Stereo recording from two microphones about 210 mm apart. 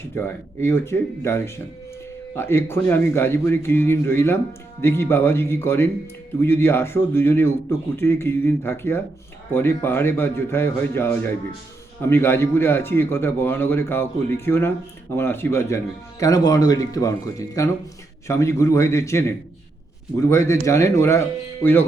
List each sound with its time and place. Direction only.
0.3 s a man's voice: 10° left (ahead or behind)